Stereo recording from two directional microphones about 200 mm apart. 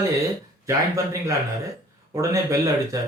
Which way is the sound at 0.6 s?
15° right (ahead or behind).